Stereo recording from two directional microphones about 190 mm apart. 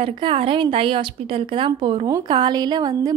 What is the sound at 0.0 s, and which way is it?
A woman's voice, 30° right (ahead or behind).